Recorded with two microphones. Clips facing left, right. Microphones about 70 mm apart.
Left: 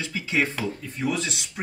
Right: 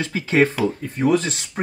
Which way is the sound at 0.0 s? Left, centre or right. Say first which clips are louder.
Right 8 dB; right.